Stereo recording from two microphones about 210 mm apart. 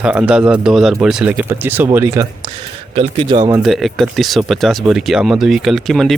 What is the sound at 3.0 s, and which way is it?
Speech, 25° right (ahead or behind).